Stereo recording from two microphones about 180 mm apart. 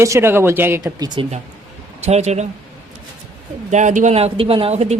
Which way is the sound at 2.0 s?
40° right (ahead or behind).